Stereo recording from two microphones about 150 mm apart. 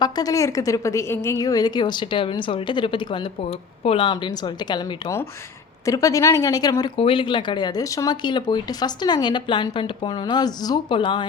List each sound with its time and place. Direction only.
0.0 s speech: 25° left (ahead or behind)
6.9 s speech: 35° left (ahead or behind)